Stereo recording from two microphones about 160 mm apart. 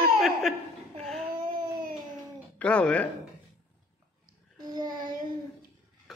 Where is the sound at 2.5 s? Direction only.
5° left (ahead or behind).